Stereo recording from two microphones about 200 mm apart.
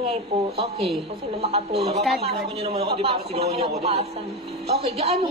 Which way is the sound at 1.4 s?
30° right (ahead or behind).